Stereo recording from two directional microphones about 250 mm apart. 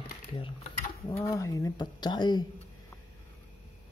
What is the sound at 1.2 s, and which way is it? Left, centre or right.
Speech, centre.